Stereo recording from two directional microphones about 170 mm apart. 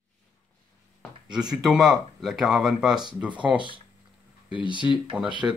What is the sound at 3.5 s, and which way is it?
Speech, 30° right (ahead or behind).